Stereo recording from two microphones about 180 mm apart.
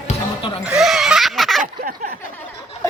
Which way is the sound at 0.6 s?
5° right (ahead or behind).